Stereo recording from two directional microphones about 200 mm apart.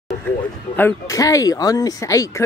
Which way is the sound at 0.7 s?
15° left (ahead or behind).